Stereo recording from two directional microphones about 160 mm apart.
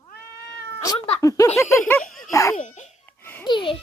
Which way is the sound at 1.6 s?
20° left (ahead or behind).